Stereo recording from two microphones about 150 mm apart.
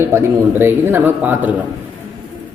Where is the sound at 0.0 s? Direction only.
15° right (ahead or behind).